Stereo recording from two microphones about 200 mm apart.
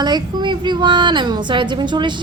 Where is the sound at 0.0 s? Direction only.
20° right (ahead or behind).